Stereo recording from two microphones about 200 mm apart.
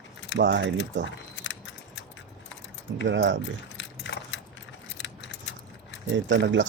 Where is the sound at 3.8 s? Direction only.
65° left (ahead or behind).